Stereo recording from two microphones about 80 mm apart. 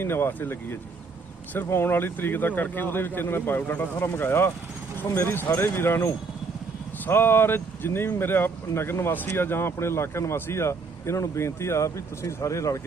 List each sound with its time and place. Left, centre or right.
0.0 s speech: left